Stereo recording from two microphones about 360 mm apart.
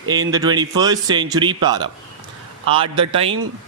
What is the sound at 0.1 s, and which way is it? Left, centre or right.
Speech, centre.